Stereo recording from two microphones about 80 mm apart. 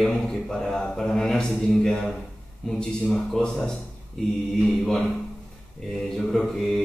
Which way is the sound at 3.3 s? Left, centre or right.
Centre.